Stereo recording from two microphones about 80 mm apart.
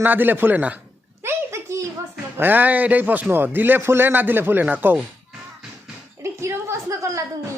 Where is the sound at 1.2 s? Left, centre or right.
Right.